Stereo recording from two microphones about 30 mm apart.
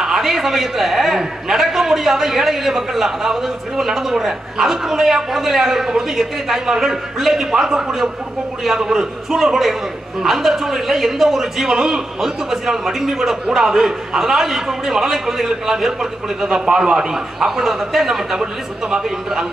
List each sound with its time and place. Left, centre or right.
0.0 s a man's voice: centre
16.5 s a man's voice: right